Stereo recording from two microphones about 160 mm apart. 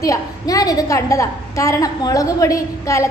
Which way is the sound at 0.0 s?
20° left (ahead or behind).